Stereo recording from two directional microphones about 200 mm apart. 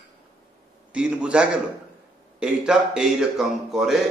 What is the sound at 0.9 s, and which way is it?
Speech, 5° right (ahead or behind).